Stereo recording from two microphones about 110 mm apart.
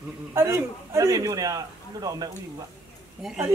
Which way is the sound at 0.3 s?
25° right (ahead or behind).